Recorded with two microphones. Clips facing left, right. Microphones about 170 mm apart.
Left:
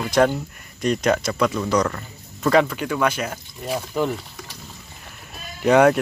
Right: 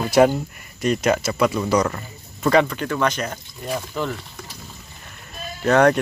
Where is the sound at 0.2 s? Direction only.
10° right (ahead or behind).